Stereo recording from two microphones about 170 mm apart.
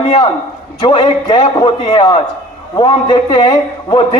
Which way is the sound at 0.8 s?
30° left (ahead or behind).